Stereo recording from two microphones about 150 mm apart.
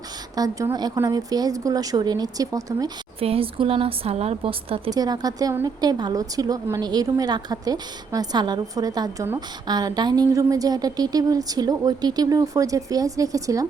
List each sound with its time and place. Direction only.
0.3 s speech: 25° right (ahead or behind)
3.2 s speech: 40° right (ahead or behind)
4.9 s speech: 25° right (ahead or behind)